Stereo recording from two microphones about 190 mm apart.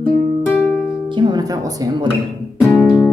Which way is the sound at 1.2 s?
20° right (ahead or behind).